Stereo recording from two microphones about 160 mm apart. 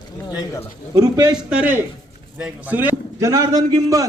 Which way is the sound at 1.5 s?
5° right (ahead or behind).